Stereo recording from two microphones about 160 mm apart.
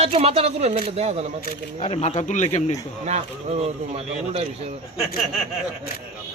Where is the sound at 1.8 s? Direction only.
40° left (ahead or behind).